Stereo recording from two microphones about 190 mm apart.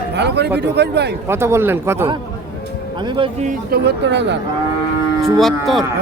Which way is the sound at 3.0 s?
25° right (ahead or behind).